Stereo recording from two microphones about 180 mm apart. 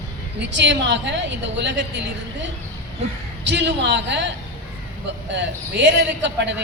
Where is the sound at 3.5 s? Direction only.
75° right (ahead or behind).